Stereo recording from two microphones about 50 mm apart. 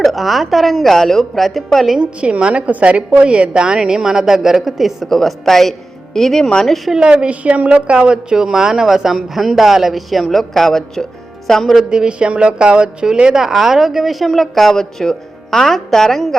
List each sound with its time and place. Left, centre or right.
0.0 s a woman's voice: centre
2.0 s speech: right; by 5.0 s centre
5.0 s a woman's voice: centre
6.9 s a woman's voice: centre
11.9 s a woman's voice: centre
13.5 s a woman's voice: centre